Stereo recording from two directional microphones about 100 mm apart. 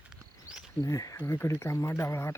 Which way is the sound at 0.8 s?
35° left (ahead or behind).